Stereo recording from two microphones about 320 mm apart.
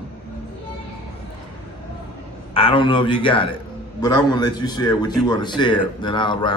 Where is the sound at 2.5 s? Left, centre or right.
Centre.